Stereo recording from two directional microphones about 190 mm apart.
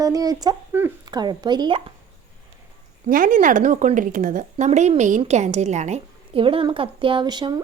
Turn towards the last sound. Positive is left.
turn(degrees=-20)  # may be behind; listen again after turning